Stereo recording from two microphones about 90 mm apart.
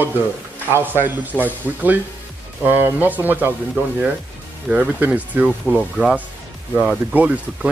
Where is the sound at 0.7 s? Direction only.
25° right (ahead or behind).